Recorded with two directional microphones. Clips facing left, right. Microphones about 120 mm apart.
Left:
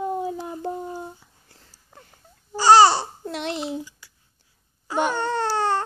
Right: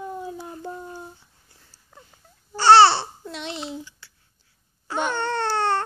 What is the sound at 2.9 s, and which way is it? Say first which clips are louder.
Speech: left 2 dB; 45° left (ahead or behind).